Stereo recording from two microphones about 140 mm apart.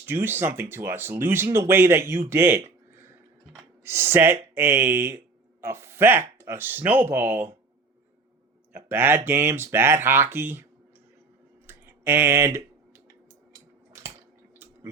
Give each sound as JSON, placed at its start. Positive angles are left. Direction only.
{"t": 0.0, "sound": "speech", "side_deg": -15}
{"t": 8.7, "sound": "speech", "side_deg": -15}
{"t": 11.6, "sound": "a sound", "side_deg": -15}